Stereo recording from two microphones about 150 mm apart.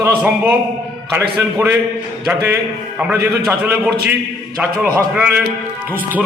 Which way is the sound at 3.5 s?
10° right (ahead or behind).